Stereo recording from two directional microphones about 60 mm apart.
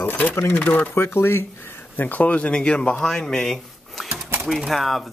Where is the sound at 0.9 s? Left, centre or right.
Left.